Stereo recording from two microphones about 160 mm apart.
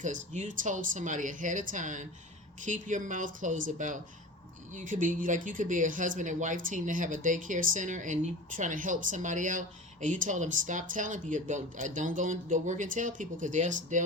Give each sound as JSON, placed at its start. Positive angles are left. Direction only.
{"t": 0.0, "sound": "speech", "side_deg": -50}